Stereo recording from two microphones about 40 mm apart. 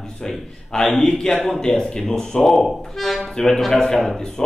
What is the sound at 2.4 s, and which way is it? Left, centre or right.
A man's voice, centre.